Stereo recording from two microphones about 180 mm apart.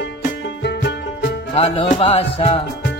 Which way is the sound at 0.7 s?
70° left (ahead or behind).